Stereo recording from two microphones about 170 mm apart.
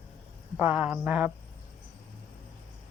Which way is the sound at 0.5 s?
10° right (ahead or behind).